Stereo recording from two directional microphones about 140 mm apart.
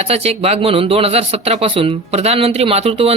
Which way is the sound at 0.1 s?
50° right (ahead or behind).